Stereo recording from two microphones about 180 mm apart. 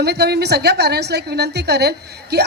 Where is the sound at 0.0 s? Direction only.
65° right (ahead or behind).